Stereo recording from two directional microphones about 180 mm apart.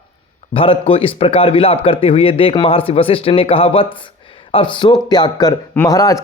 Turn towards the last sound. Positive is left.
turn(degrees=20)  # may be behind; listen again after turning